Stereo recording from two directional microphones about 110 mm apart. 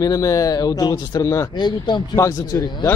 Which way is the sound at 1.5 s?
40° left (ahead or behind).